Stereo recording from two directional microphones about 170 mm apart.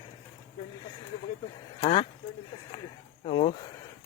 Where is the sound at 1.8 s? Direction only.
30° left (ahead or behind).